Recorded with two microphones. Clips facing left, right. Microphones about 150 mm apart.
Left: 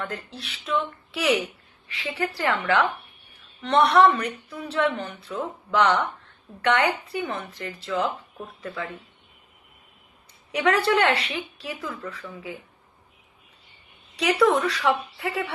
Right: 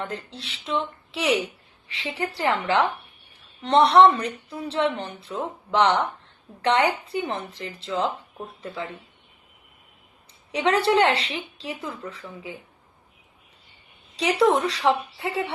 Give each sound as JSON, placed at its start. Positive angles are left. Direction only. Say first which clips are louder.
{"t": 0.0, "sound": "a woman's voice", "louder": "right 1 dB", "side_deg": -25}
{"t": 3.6, "sound": "a woman's voice", "louder": "right 2 dB", "side_deg": -30}
{"t": 10.5, "sound": "a woman's voice", "louder": "right 1 dB", "side_deg": -25}
{"t": 14.2, "sound": "a woman's voice", "louder": "even", "side_deg": -25}